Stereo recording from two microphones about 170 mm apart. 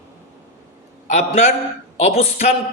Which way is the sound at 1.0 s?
45° left (ahead or behind).